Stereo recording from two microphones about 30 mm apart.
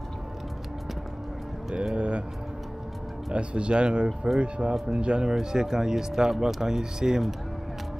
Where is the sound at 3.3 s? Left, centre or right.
Right.